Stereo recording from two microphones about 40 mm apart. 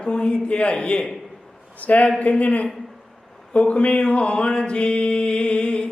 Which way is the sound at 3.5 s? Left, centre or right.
Left.